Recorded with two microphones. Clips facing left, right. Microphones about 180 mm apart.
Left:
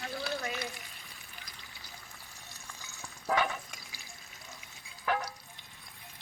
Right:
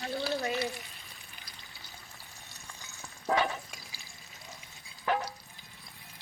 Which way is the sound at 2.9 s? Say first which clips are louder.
Right 2 dB; 25° right (ahead or behind).